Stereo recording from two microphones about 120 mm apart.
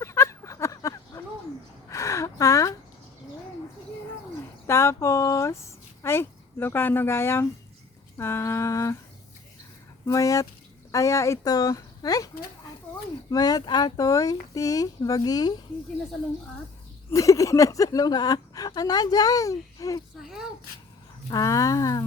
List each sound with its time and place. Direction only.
0.0 s a sound: 25° left (ahead or behind)
4.6 s speech: 25° left (ahead or behind)
10.1 s speech: 25° left (ahead or behind)
13.3 s speech: 35° left (ahead or behind)
17.1 s speech: 25° left (ahead or behind)
21.2 s speech: 30° left (ahead or behind)